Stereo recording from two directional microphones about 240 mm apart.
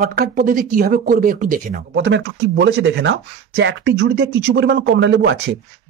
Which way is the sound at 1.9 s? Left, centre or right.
Right.